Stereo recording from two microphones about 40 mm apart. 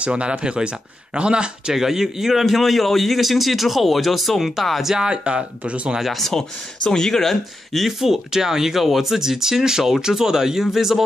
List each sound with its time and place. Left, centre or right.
0.0 s speech: right
1.7 s a man's voice: centre
4.9 s speech: right
6.1 s speech: centre
7.7 s speech: centre